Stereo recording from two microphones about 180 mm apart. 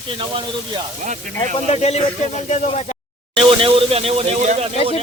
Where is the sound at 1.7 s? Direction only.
35° left (ahead or behind).